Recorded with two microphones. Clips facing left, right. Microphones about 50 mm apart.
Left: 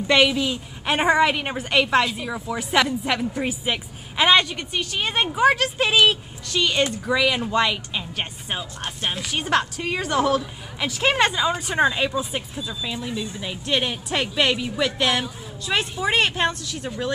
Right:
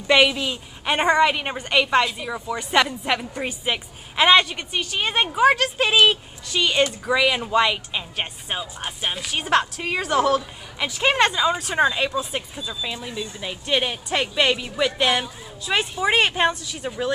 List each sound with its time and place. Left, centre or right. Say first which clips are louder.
0.0 s a woman's voice: right 1 dB; centre